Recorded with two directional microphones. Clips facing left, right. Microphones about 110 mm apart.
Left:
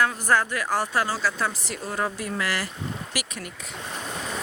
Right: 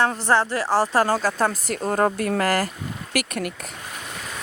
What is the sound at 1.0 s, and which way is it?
Speech, 50° right (ahead or behind).